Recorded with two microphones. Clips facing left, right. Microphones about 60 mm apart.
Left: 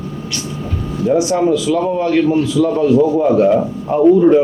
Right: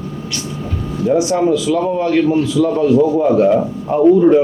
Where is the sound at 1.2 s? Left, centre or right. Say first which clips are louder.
Even; left.